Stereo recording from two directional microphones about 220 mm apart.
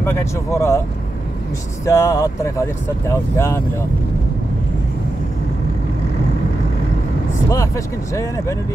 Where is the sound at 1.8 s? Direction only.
15° left (ahead or behind).